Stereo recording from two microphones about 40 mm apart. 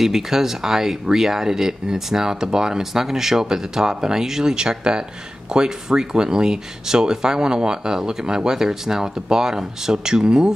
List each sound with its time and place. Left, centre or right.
0.0 s speech: centre